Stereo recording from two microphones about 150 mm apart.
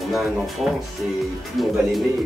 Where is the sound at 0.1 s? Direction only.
Centre (ahead or behind).